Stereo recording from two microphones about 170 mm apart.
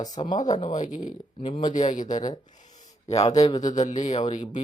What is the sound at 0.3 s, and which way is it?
Speech, 45° left (ahead or behind).